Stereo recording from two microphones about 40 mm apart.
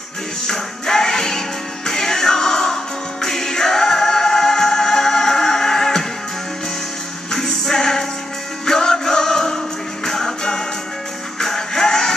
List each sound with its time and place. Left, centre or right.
0.5 s music: centre
7.3 s music: centre